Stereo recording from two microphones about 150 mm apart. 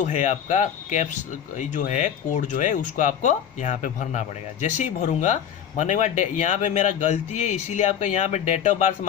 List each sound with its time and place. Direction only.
0.0 s speech: 55° left (ahead or behind)